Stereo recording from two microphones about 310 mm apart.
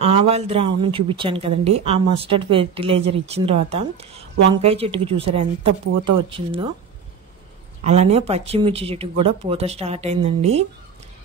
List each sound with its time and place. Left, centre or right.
0.0 s speech: centre
7.8 s speech: right